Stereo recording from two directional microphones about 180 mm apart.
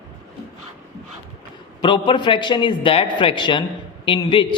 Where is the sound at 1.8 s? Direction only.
25° left (ahead or behind).